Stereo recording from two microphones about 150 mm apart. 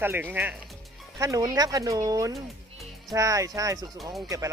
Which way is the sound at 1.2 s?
25° right (ahead or behind).